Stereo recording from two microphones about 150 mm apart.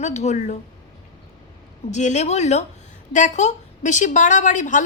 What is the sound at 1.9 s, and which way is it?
A woman's voice, 50° left (ahead or behind).